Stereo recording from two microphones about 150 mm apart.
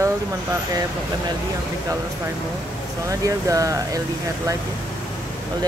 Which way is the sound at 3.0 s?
20° right (ahead or behind).